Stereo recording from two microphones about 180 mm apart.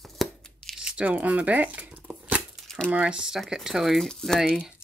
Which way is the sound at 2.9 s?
5° right (ahead or behind).